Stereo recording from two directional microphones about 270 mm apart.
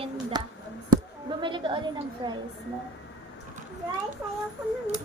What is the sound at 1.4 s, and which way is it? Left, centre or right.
Speech, centre.